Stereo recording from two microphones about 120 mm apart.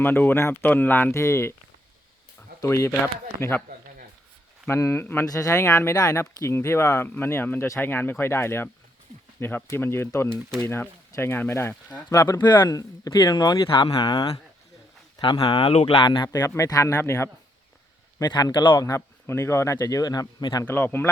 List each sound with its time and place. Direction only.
0.0 s speech: 15° left (ahead or behind)
2.6 s speech: 25° left (ahead or behind)
4.6 s speech: 20° left (ahead or behind)
13.7 s speech: 50° left (ahead or behind); by 17.2 s 20° left (ahead or behind)
18.2 s speech: 35° left (ahead or behind)
18.9 s speech: 25° left (ahead or behind)
20.7 s speech: 20° left (ahead or behind)